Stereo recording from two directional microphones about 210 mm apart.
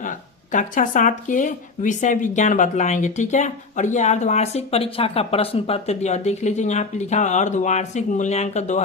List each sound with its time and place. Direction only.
0.0 s speech: 40° left (ahead or behind)